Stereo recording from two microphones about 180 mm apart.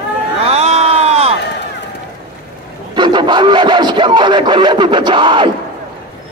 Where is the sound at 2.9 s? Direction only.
25° right (ahead or behind).